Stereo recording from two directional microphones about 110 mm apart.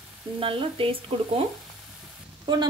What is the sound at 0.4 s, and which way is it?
Speech, 55° right (ahead or behind).